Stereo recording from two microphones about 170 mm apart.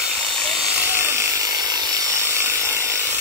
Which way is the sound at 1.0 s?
15° right (ahead or behind).